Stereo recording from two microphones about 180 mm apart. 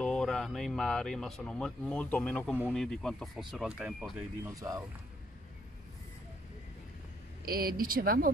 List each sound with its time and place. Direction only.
0.0 s speech: 5° left (ahead or behind)
4.6 s speech: 20° right (ahead or behind)
7.4 s speech: 55° right (ahead or behind)